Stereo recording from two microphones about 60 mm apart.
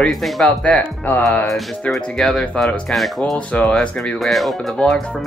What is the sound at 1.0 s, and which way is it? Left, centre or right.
Speech, left.